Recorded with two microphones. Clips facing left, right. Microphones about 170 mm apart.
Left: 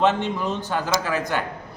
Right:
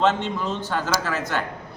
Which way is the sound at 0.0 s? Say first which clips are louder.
Left 1 dB; 15° left (ahead or behind).